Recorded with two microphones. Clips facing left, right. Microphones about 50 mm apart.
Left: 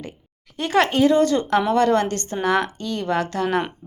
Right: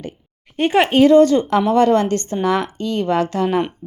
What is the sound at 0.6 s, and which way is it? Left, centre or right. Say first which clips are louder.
Speech: right 4 dB; right.